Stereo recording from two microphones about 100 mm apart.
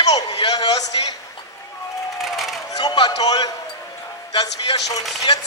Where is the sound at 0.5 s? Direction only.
40° left (ahead or behind).